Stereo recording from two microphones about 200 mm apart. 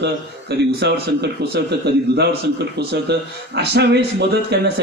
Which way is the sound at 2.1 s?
55° right (ahead or behind).